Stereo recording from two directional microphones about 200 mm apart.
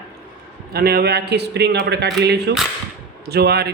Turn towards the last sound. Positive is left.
turn(degrees=-55)  # may be behind; listen again after turning